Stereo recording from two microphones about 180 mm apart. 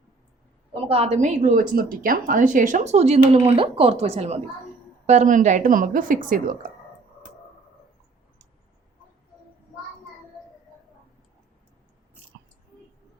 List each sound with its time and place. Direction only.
0.9 s a woman's voice: 35° right (ahead or behind)